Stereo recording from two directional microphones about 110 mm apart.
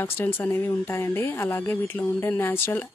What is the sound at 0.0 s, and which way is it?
Speech, 20° left (ahead or behind).